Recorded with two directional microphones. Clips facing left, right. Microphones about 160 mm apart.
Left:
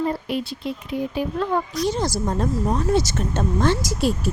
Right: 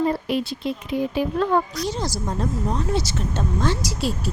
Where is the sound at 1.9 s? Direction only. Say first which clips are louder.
Left 4 dB; 50° left (ahead or behind).